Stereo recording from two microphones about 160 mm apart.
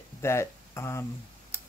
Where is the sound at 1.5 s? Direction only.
15° left (ahead or behind).